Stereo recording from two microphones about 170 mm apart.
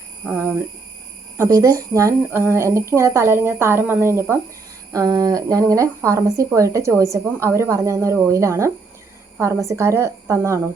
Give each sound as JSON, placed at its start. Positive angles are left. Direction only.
{"t": 0.3, "sound": "a woman's voice", "side_deg": -15}